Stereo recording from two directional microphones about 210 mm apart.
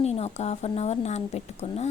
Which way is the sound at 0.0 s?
30° left (ahead or behind).